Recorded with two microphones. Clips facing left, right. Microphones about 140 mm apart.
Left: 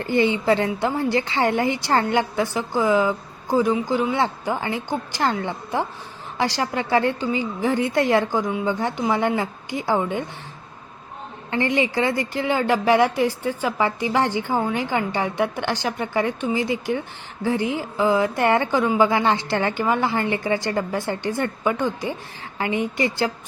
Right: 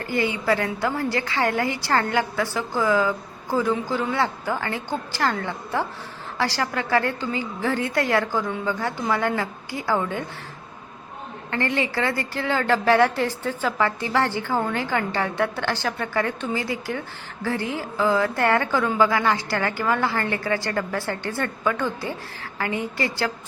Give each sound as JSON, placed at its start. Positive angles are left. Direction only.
{"t": 0.0, "sound": "a woman's voice", "side_deg": 25}
{"t": 11.5, "sound": "a woman's voice", "side_deg": 20}